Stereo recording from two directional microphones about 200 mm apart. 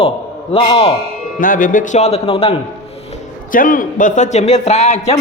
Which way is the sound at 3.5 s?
45° left (ahead or behind).